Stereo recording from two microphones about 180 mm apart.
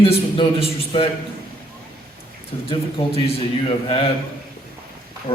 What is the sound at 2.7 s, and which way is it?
A man's voice, 30° left (ahead or behind).